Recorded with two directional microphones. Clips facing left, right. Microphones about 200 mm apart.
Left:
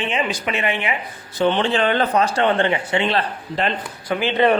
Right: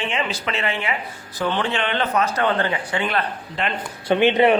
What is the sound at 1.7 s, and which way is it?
Speech, 40° left (ahead or behind).